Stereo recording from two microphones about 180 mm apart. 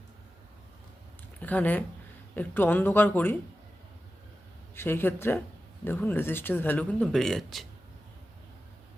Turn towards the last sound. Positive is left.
turn(degrees=0)  # may be behind; listen again after turning